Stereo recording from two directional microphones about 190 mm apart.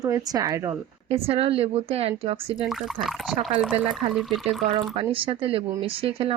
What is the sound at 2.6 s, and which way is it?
Speech, centre (ahead or behind).